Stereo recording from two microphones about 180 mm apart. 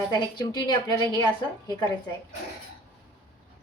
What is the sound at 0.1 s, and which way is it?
A woman's voice, 25° left (ahead or behind).